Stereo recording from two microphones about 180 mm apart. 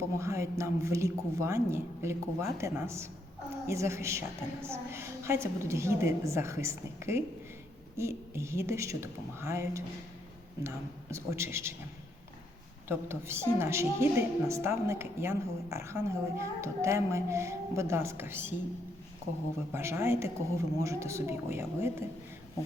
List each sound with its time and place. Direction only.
0.2 s a woman's voice: 15° right (ahead or behind)
12.9 s a woman's voice: 15° right (ahead or behind)
19.7 s a woman's voice: 15° right (ahead or behind)